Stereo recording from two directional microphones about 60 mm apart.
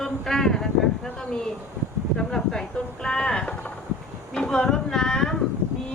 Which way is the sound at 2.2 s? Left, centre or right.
Centre.